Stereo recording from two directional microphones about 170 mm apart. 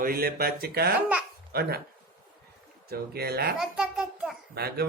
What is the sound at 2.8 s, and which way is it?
Speech, 65° right (ahead or behind).